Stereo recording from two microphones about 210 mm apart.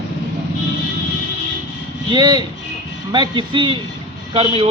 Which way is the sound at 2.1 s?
20° right (ahead or behind).